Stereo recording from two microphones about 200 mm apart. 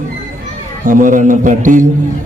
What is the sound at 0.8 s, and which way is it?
A man's voice, 40° right (ahead or behind).